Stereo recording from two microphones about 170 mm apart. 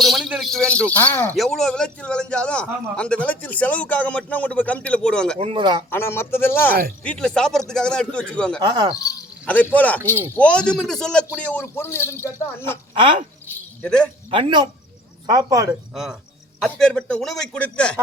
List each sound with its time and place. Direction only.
0.0 s a sound: centre (ahead or behind)
1.4 s a man's voice: centre (ahead or behind)
5.4 s speech: 30° right (ahead or behind)
5.9 s a man's voice: 15° left (ahead or behind)
8.6 s speech: 25° right (ahead or behind)
9.5 s a man's voice: 10° left (ahead or behind)
10.0 s speech: 15° right (ahead or behind)
10.3 s a man's voice: 5° left (ahead or behind)
13.5 s a sound: 5° left (ahead or behind)
14.3 s speech: 30° right (ahead or behind)
16.6 s a man's voice: centre (ahead or behind)